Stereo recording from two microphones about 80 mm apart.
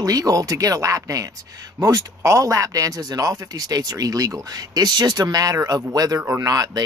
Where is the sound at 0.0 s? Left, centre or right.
Right.